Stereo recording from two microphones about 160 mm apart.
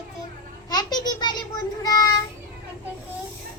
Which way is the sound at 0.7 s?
25° left (ahead or behind).